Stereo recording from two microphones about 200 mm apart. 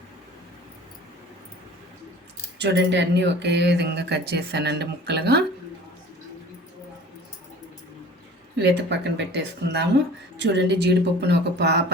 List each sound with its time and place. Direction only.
2.6 s speech: 60° right (ahead or behind)
8.5 s speech: 60° right (ahead or behind)